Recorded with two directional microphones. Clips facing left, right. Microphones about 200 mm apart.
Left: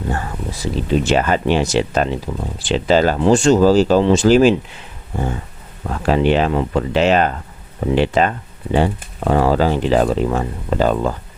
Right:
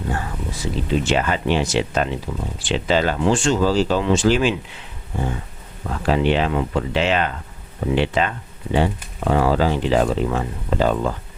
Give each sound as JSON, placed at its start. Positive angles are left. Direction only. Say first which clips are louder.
{"t": 0.6, "sound": "speech", "louder": "left 4 dB", "side_deg": 40}
{"t": 6.1, "sound": "speech", "louder": "left 3 dB", "side_deg": 45}